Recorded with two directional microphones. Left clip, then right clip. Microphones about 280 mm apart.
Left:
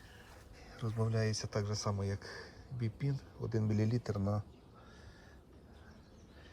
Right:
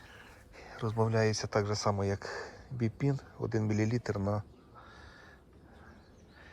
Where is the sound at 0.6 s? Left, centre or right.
Centre.